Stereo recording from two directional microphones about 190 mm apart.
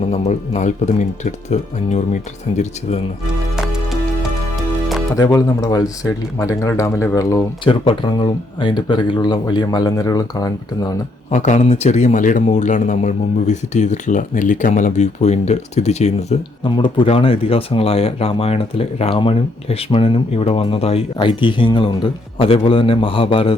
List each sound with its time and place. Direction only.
0.1 s a man's voice: 35° left (ahead or behind)
5.1 s speech: 15° left (ahead or behind)
7.7 s speech: 25° left (ahead or behind)
11.3 s a man's voice: 40° left (ahead or behind)